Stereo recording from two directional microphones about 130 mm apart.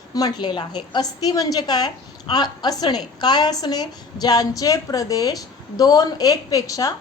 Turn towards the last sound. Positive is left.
turn(degrees=25)  # may be behind; listen again after turning